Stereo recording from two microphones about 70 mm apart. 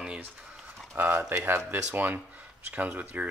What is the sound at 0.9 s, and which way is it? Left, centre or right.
Speech, right.